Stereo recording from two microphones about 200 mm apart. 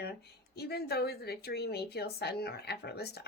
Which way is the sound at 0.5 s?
55° left (ahead or behind).